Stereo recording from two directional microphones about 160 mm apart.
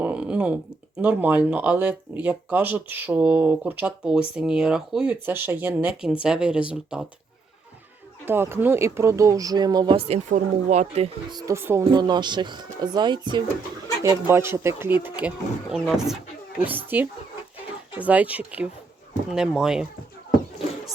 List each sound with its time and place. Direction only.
0.0 s speech: 10° right (ahead or behind)
8.2 s speech: 15° right (ahead or behind)
10.1 s speech: 50° right (ahead or behind)
11.3 s speech: 20° right (ahead or behind)
11.9 s speech: 25° right (ahead or behind)
14.0 s speech: 20° right (ahead or behind)